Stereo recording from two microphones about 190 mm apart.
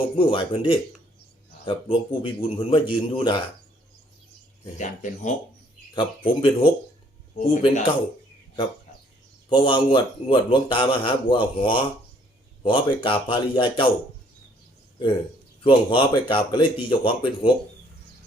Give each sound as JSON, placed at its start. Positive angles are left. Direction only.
{"t": 0.2, "sound": "speech", "side_deg": 25}
{"t": 4.8, "sound": "speech", "side_deg": 40}
{"t": 5.9, "sound": "speech", "side_deg": 25}
{"t": 9.5, "sound": "speech", "side_deg": 25}
{"t": 15.6, "sound": "speech", "side_deg": 25}